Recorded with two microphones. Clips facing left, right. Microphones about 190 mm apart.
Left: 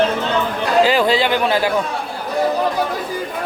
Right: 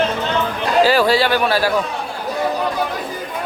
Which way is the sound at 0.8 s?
20° left (ahead or behind).